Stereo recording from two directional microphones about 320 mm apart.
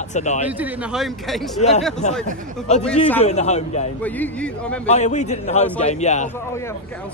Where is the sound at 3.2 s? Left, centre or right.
Left.